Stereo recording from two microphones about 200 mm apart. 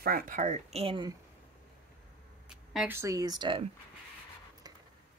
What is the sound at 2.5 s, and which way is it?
Speech, 5° right (ahead or behind).